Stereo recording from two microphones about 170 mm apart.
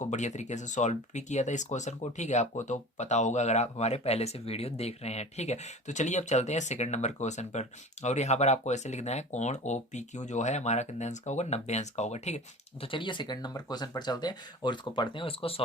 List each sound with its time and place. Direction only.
0.0 s speech: 45° left (ahead or behind)
12.8 s speech: 30° left (ahead or behind)